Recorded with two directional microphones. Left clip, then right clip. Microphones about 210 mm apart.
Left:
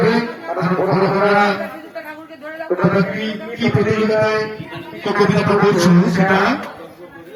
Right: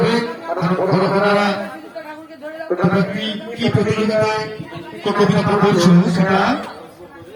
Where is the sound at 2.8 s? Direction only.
50° right (ahead or behind).